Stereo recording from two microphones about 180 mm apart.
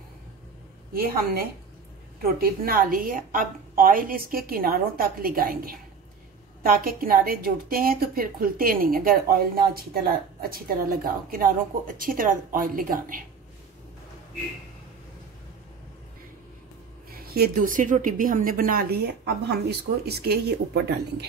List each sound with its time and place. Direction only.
0.9 s a woman's voice: 55° right (ahead or behind)
17.1 s speech: 55° right (ahead or behind)